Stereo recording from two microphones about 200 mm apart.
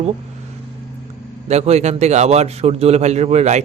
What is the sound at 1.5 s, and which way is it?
A man's voice, 35° right (ahead or behind).